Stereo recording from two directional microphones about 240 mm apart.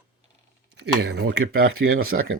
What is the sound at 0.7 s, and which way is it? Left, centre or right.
Speech, right.